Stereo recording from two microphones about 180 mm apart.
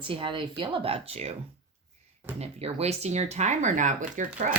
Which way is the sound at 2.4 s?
35° right (ahead or behind).